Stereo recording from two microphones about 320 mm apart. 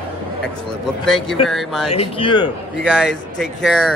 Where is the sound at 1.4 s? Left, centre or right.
Centre.